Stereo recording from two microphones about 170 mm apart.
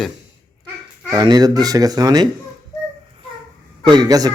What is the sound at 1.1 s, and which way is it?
Speech, 20° right (ahead or behind).